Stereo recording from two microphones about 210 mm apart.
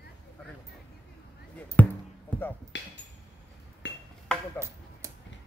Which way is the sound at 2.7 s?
55° left (ahead or behind).